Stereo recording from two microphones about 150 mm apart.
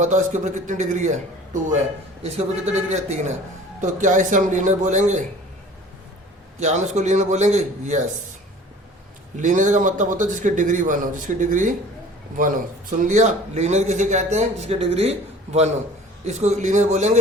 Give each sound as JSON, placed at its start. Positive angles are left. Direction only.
{"t": 0.0, "sound": "a man's voice", "side_deg": -55}
{"t": 6.6, "sound": "a man's voice", "side_deg": -50}
{"t": 9.4, "sound": "speech", "side_deg": -55}
{"t": 13.0, "sound": "a man's voice", "side_deg": -55}